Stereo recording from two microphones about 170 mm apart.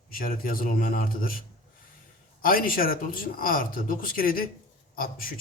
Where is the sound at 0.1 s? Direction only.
55° left (ahead or behind).